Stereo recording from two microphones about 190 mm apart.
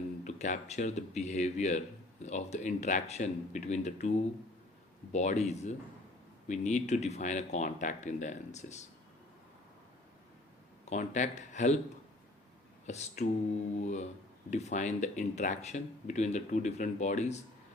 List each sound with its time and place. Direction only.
0.3 s speech: 40° left (ahead or behind)
5.1 s speech: 35° left (ahead or behind)
10.8 s speech: 40° left (ahead or behind)
12.8 s speech: 35° left (ahead or behind)